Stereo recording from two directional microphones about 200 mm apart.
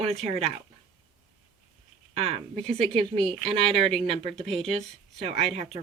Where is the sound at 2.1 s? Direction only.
30° right (ahead or behind).